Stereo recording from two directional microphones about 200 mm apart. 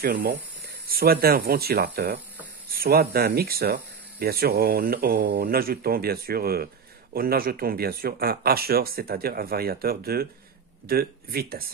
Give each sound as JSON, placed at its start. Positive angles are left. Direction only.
{"t": 0.0, "sound": "speech", "side_deg": -50}